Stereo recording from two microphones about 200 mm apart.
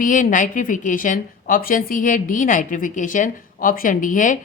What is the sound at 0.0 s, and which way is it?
A woman's voice, 40° left (ahead or behind).